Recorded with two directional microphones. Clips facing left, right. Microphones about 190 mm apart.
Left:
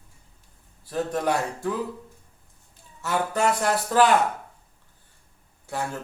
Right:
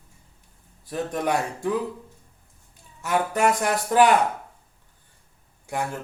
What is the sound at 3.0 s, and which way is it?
Speech, 15° right (ahead or behind).